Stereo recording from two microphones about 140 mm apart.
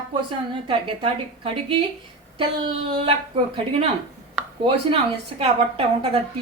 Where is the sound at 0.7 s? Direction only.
40° right (ahead or behind).